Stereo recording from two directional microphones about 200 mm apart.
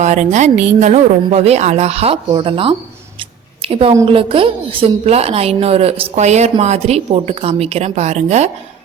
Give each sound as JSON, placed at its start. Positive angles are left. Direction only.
{"t": 0.0, "sound": "a woman's voice", "side_deg": -35}